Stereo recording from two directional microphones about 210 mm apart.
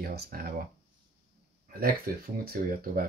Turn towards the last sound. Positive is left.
turn(degrees=-45)  # may be behind; listen again after turning